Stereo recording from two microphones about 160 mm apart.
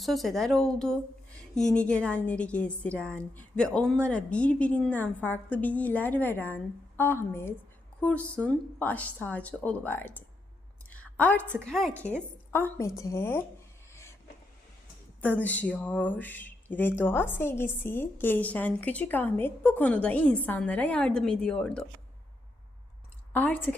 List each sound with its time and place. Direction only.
0.0 s speech: centre (ahead or behind)
10.8 s a sound: 10° left (ahead or behind)
11.6 s speech: 5° left (ahead or behind)
13.9 s a sound: 15° left (ahead or behind)
15.2 s speech: 10° left (ahead or behind)
23.3 s a woman's voice: 10° left (ahead or behind)